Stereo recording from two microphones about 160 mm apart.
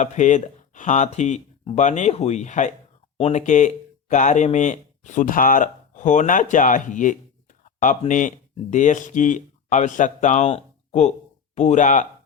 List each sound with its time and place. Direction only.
0.0 s speech: 50° left (ahead or behind)